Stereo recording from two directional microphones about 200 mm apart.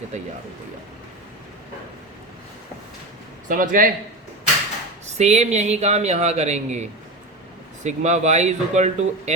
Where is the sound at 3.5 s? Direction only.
45° right (ahead or behind).